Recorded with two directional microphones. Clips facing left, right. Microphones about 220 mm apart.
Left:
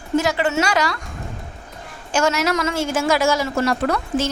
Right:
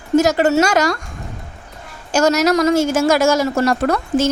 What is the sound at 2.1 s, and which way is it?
A woman's voice, 40° right (ahead or behind).